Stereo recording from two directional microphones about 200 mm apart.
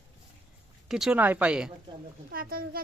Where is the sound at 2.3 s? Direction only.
45° right (ahead or behind).